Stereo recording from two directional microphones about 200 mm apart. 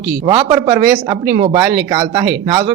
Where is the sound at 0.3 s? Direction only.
25° right (ahead or behind).